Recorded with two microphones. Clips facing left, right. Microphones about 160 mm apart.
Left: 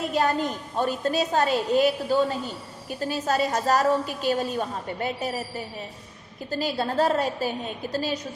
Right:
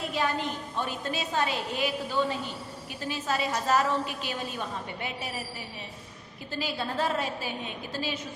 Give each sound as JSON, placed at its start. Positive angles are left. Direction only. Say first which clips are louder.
{"t": 0.2, "sound": "a woman's voice", "louder": "left 5 dB", "side_deg": 40}